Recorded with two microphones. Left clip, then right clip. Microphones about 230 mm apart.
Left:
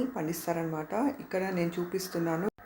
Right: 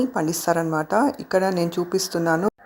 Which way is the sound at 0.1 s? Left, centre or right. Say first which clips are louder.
Right 11 dB; right.